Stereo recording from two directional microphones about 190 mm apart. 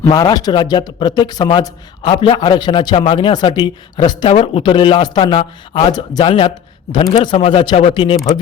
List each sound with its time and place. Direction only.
0.0 s speech: 20° left (ahead or behind)